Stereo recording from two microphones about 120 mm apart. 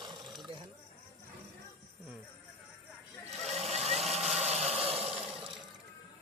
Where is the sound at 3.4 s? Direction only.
65° right (ahead or behind).